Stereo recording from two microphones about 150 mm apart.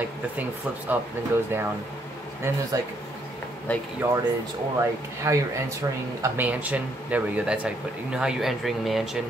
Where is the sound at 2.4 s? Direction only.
15° right (ahead or behind).